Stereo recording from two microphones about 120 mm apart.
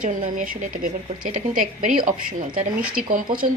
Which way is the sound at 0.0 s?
90° right.